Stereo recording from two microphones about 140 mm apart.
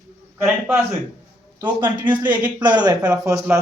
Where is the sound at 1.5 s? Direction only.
15° right (ahead or behind).